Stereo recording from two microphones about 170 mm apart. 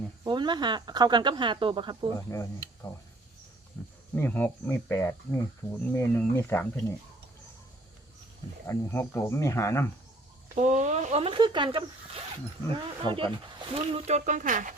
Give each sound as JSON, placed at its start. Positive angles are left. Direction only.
{"t": 0.3, "sound": "speech", "side_deg": -25}
{"t": 2.1, "sound": "speech", "side_deg": 15}
{"t": 3.8, "sound": "cricket", "side_deg": 10}
{"t": 4.1, "sound": "speech", "side_deg": 10}
{"t": 8.6, "sound": "speech", "side_deg": 15}
{"t": 10.5, "sound": "speech", "side_deg": -45}